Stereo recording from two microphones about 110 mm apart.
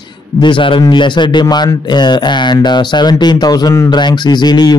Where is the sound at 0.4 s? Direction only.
50° left (ahead or behind).